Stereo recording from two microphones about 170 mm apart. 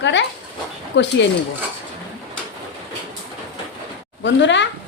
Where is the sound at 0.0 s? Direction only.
90° left.